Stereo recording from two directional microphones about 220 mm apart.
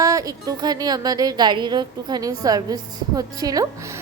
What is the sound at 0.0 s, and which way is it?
A woman's voice, 15° right (ahead or behind).